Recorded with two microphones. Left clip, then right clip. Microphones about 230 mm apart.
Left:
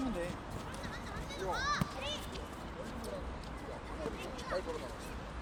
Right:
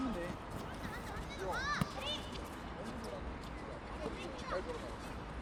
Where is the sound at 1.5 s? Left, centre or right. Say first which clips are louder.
Left 3 dB; left.